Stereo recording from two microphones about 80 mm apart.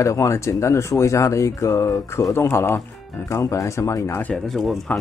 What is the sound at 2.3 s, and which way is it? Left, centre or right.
Speech, left.